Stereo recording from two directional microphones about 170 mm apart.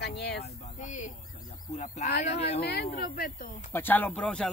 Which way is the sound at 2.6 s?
70° left (ahead or behind).